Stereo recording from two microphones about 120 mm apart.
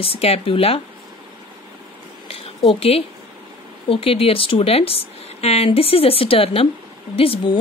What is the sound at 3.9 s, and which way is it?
Speech, 50° left (ahead or behind).